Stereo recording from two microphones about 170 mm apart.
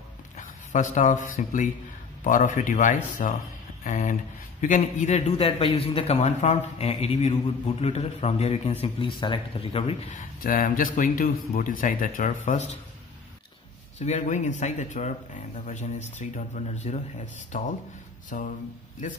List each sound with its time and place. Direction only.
0.4 s a man's voice: 50° left (ahead or behind)
10.1 s speech: 55° left (ahead or behind)
13.9 s speech: 45° left (ahead or behind)